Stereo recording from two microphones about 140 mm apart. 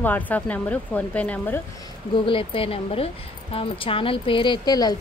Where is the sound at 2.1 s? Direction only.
40° left (ahead or behind).